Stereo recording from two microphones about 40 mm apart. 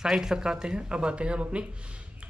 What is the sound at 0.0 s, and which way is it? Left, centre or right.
Speech, centre.